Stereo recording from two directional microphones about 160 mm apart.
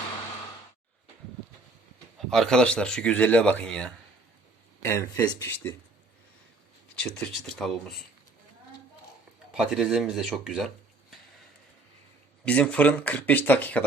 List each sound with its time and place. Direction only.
2.1 s speech: centre (ahead or behind)
4.8 s speech: 15° left (ahead or behind)
6.9 s speech: 5° left (ahead or behind)
9.6 s speech: centre (ahead or behind)
12.5 s speech: 5° left (ahead or behind)